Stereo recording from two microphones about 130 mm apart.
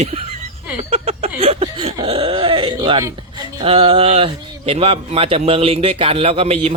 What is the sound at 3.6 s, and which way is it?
A man's voice, 50° right (ahead or behind).